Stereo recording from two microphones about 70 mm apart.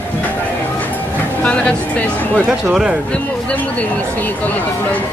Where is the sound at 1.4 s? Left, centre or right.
Centre.